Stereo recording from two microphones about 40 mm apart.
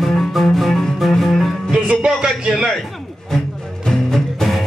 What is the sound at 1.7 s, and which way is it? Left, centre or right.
Music, right.